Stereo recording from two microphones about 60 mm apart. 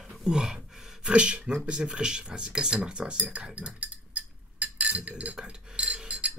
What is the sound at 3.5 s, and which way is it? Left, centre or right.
Chink, right.